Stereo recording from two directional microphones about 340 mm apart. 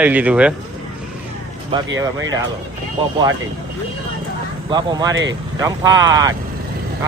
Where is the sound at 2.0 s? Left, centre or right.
Centre.